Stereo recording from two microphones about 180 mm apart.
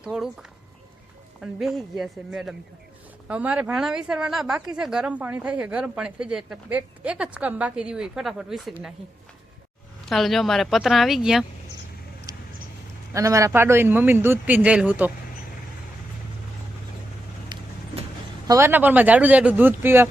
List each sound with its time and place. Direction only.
0.0 s speech: 5° right (ahead or behind)
1.4 s speech: centre (ahead or behind)
10.1 s speech: centre (ahead or behind)
13.1 s speech: 15° right (ahead or behind)
17.5 s vehicle: 25° right (ahead or behind)
18.4 s speech: 15° right (ahead or behind)